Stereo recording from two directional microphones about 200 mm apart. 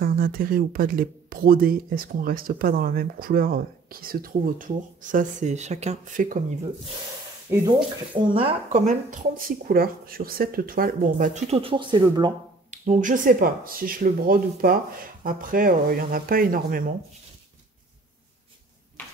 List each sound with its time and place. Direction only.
0.0 s speech: 45° right (ahead or behind)
7.5 s speech: 15° right (ahead or behind)
8.1 s speech: 25° right (ahead or behind)
8.8 s speech: 40° right (ahead or behind); by 12.3 s 20° right (ahead or behind)
12.7 s speech: 35° right (ahead or behind)